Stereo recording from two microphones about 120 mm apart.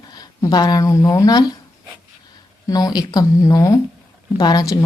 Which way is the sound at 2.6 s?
30° left (ahead or behind).